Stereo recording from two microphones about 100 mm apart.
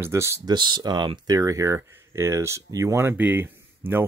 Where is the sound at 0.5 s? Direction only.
50° right (ahead or behind).